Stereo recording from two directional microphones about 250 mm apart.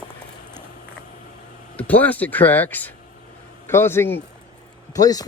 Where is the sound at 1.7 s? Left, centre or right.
Centre.